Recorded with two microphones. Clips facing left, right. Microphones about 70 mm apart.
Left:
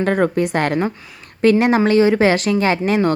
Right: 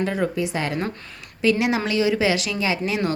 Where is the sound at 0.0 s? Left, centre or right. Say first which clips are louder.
Left 6 dB; left.